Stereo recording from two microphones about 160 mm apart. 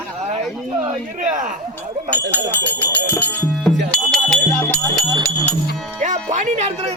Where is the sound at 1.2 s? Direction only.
55° right (ahead or behind).